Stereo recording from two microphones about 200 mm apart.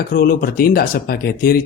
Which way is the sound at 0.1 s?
45° left (ahead or behind).